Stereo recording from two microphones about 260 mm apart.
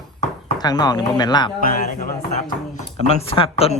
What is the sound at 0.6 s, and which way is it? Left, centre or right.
Speech, centre.